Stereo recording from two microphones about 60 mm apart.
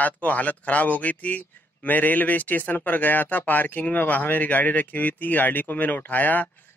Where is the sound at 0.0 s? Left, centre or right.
Left.